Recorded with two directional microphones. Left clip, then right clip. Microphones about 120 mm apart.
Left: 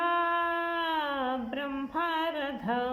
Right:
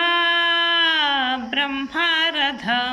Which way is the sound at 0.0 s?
40° left (ahead or behind).